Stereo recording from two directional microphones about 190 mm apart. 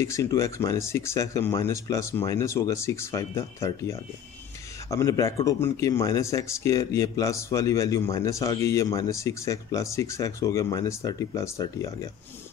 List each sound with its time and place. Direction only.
0.0 s speech: 15° left (ahead or behind)